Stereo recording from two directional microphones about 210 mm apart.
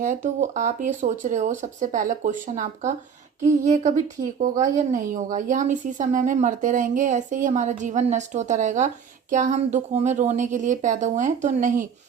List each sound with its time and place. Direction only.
0.0 s a woman's voice: 40° right (ahead or behind)